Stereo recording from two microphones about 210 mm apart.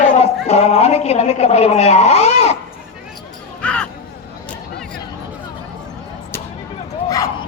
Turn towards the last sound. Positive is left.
turn(degrees=15)  # may be behind; listen again after turning